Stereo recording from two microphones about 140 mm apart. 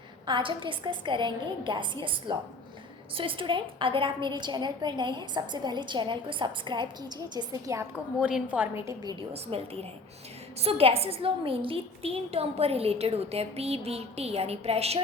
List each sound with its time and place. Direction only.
0.3 s a woman's voice: 35° right (ahead or behind)
8.2 s a woman's voice: 10° right (ahead or behind); by 9.1 s 25° right (ahead or behind)
9.5 s a woman's voice: 45° right (ahead or behind)